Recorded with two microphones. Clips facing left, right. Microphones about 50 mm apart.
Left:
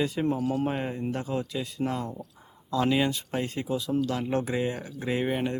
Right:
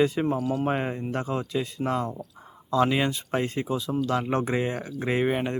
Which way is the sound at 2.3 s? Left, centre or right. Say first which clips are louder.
Right 4 dB; right.